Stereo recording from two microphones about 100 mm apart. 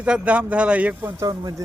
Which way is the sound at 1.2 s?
35° right (ahead or behind).